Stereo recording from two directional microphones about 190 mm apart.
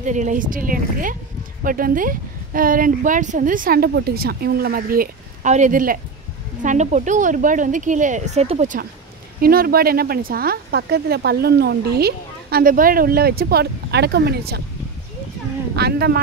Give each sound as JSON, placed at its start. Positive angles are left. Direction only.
{"t": 0.0, "sound": "a woman's voice", "side_deg": -40}
{"t": 9.4, "sound": "speech", "side_deg": -50}
{"t": 15.7, "sound": "speech", "side_deg": -55}